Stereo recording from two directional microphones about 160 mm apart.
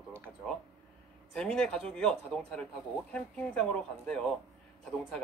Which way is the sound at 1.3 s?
5° left (ahead or behind).